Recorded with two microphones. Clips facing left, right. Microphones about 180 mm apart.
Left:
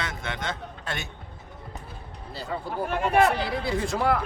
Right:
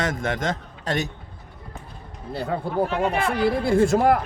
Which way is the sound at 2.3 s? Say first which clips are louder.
Right 7 dB; 55° right (ahead or behind).